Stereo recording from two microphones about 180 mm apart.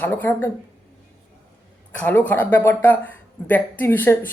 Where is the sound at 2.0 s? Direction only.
10° left (ahead or behind).